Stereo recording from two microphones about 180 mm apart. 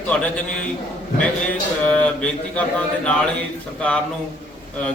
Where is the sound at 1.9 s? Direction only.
5° left (ahead or behind).